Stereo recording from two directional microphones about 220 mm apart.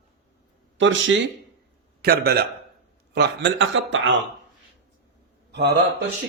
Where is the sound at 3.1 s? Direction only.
55° right (ahead or behind).